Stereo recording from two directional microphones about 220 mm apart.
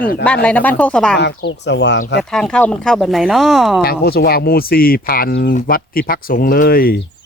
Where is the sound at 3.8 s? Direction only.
45° left (ahead or behind).